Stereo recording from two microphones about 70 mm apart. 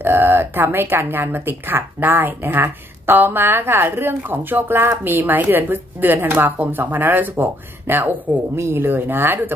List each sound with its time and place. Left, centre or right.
0.0 s a woman's voice: right
8.5 s speech: right
8.8 s a woman's voice: right